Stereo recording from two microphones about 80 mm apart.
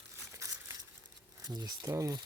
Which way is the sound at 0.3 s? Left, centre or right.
Right.